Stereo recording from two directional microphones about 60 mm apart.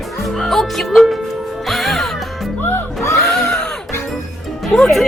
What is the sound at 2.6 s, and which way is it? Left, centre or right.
Music, left.